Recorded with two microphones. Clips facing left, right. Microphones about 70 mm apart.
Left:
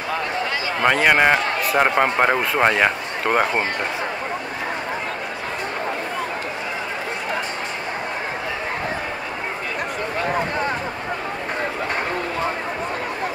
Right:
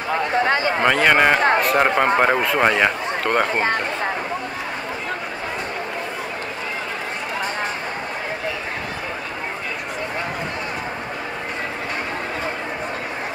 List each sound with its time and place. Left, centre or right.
0.8 s speech: centre